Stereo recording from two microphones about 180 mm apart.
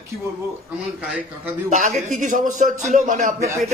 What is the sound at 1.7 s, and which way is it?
A man's voice, 40° right (ahead or behind).